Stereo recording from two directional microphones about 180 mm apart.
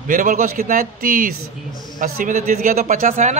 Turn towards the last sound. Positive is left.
turn(degrees=-40)  # may be behind; listen again after turning